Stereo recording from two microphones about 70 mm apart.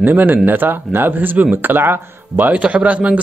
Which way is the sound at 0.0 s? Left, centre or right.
Right.